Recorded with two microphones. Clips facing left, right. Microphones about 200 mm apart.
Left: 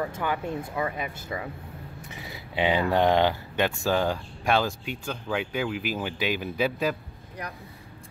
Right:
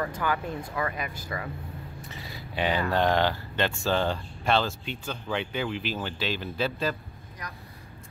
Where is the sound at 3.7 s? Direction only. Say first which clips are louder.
Left 1 dB; 5° left (ahead or behind).